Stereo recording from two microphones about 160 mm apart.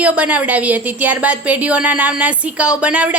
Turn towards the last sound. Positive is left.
turn(degrees=-10)  # may be behind; listen again after turning